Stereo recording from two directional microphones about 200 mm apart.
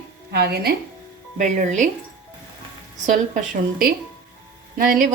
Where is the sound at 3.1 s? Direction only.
45° right (ahead or behind).